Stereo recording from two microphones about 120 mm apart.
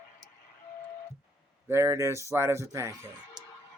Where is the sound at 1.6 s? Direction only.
20° right (ahead or behind).